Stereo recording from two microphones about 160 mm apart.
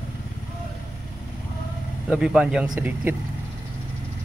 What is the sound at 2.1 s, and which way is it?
A man's voice, 5° right (ahead or behind).